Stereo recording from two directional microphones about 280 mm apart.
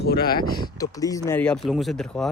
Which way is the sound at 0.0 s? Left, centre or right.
Left.